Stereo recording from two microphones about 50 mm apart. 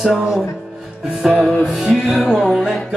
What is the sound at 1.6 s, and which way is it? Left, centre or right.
Music, centre.